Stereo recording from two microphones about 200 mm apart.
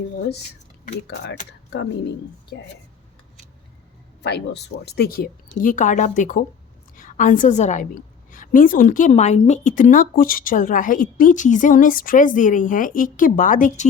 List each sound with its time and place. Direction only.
2.5 s speech: 55° left (ahead or behind)
4.2 s a woman's voice: 55° left (ahead or behind); by 13.8 s 40° left (ahead or behind)